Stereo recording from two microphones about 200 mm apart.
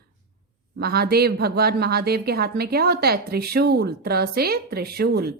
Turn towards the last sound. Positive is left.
turn(degrees=-50)  # may be behind; listen again after turning